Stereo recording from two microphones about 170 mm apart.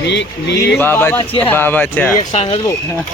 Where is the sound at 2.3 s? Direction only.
35° left (ahead or behind).